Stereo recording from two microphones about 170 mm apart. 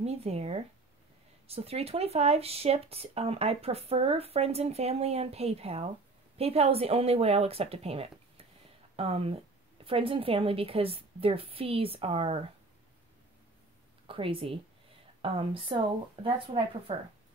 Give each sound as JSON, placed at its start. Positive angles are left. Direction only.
{"t": 0.0, "sound": "speech", "side_deg": -35}
{"t": 14.0, "sound": "speech", "side_deg": -30}